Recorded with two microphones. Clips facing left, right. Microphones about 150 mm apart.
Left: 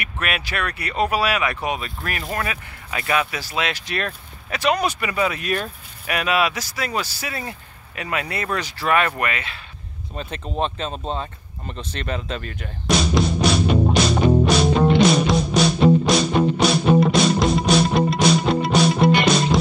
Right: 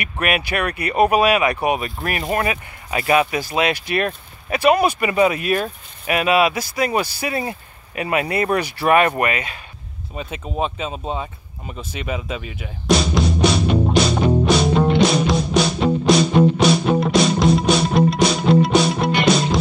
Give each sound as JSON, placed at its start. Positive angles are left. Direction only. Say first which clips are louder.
{"t": 0.2, "sound": "speech", "louder": "right 5 dB", "side_deg": -15}
{"t": 3.8, "sound": "speech", "louder": "right 6 dB", "side_deg": -10}
{"t": 10.1, "sound": "a sound", "louder": "right 1 dB", "side_deg": -5}
{"t": 16.1, "sound": "music", "louder": "right 4 dB", "side_deg": 0}